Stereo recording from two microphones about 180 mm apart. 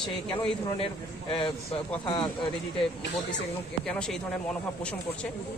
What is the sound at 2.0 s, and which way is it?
Speech, 25° left (ahead or behind).